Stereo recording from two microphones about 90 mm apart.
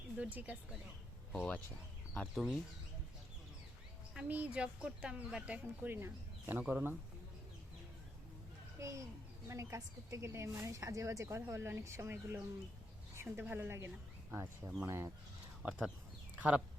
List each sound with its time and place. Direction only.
0.2 s speech: 15° right (ahead or behind)
1.3 s speech: 10° left (ahead or behind)
2.2 s speech: 5° right (ahead or behind)
4.1 s speech: 15° right (ahead or behind)
8.8 s a woman's voice: 35° right (ahead or behind)
15.6 s speech: 15° right (ahead or behind)